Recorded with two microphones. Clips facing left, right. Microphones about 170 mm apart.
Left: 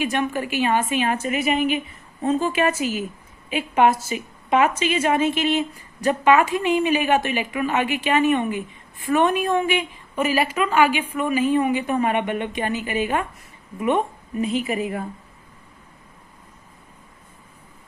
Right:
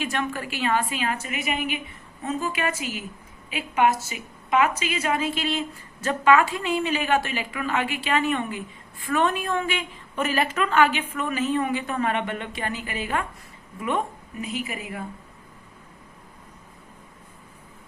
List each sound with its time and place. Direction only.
0.0 s a woman's voice: 20° left (ahead or behind)